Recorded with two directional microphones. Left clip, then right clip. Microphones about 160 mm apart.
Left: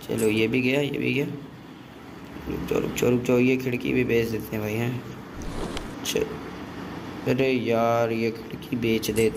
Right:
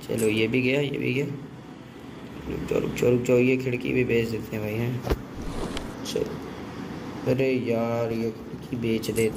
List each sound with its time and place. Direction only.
0.1 s speech: 5° left (ahead or behind)
2.7 s speech: centre (ahead or behind)
5.6 s a sound: centre (ahead or behind)
7.2 s speech: 10° left (ahead or behind)